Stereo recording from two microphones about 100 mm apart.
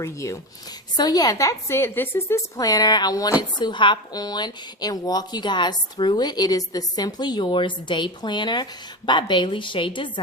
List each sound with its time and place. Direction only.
0.0 s a woman's voice: 30° left (ahead or behind)
0.9 s a woman's voice: 40° left (ahead or behind); by 2.4 s 25° left (ahead or behind)
2.6 s a woman's voice: 40° left (ahead or behind)
3.6 s a woman's voice: 50° left (ahead or behind)